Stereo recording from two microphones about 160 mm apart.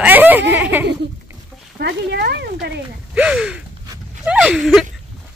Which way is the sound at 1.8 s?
90° right.